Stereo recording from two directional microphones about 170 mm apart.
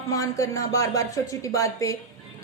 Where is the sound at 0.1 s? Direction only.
20° left (ahead or behind).